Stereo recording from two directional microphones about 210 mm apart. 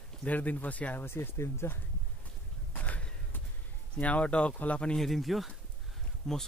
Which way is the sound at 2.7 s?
5° left (ahead or behind).